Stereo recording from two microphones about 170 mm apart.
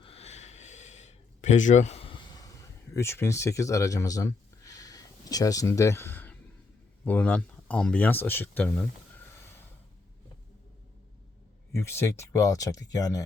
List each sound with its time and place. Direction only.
0.0 s a sound: 35° left (ahead or behind); by 6.4 s 10° left (ahead or behind)
7.0 s speech: 10° left (ahead or behind)
11.7 s speech: 15° left (ahead or behind)